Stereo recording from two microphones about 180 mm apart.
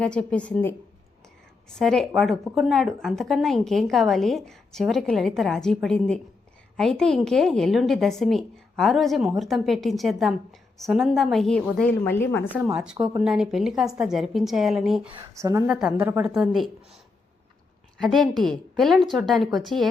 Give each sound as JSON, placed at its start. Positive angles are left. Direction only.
{"t": 0.0, "sound": "speech", "side_deg": 5}
{"t": 1.8, "sound": "speech", "side_deg": 0}
{"t": 12.7, "sound": "speech", "side_deg": -5}
{"t": 15.4, "sound": "a woman's voice", "side_deg": -15}
{"t": 16.3, "sound": "speech", "side_deg": 0}
{"t": 17.9, "sound": "speech", "side_deg": 0}